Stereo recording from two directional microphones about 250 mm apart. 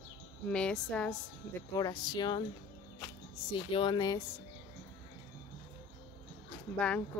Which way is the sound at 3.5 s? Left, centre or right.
Centre.